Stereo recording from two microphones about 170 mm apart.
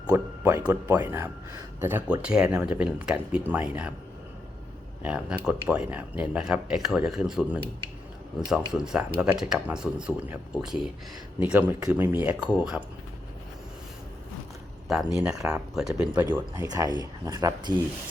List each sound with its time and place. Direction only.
0.1 s speech: 15° right (ahead or behind)
5.0 s speech: 5° right (ahead or behind)
8.7 s speech: 5° right (ahead or behind)
14.9 s speech: 5° right (ahead or behind)
16.6 s speech: 20° right (ahead or behind)